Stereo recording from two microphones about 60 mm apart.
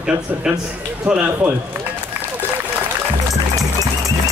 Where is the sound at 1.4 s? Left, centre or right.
Right.